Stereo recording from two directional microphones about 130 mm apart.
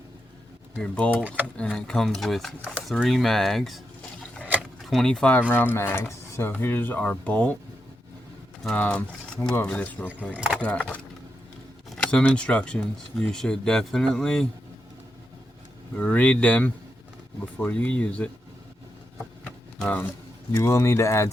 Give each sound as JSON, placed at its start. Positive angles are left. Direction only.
{"t": 0.8, "sound": "speech", "side_deg": 10}
{"t": 4.8, "sound": "speech", "side_deg": 0}
{"t": 8.6, "sound": "speech", "side_deg": 10}
{"t": 10.3, "sound": "speech", "side_deg": -10}
{"t": 10.6, "sound": "speech", "side_deg": 10}
{"t": 12.0, "sound": "speech", "side_deg": 10}
{"t": 16.0, "sound": "speech", "side_deg": 10}
{"t": 19.2, "sound": "a sound", "side_deg": 10}
{"t": 20.6, "sound": "speech", "side_deg": 20}